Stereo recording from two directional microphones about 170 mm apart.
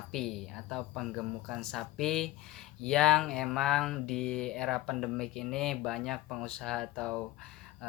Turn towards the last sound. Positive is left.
turn(degrees=5)  # may be behind; listen again after turning